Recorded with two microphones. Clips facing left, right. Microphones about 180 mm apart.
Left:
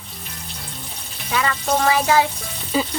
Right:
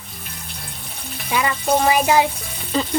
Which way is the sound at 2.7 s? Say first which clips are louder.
Even; 5° left (ahead or behind).